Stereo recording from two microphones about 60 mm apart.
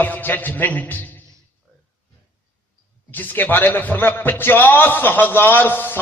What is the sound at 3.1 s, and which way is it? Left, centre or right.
A man's voice, left.